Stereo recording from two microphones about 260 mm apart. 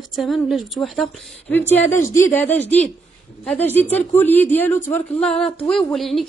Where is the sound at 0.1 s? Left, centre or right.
Centre.